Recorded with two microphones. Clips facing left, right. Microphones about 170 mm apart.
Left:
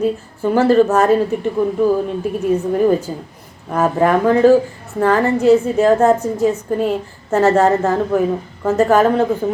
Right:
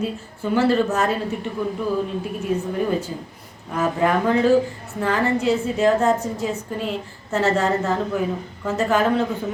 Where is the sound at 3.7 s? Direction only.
50° left (ahead or behind).